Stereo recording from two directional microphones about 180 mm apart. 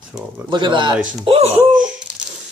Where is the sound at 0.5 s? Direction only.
25° right (ahead or behind).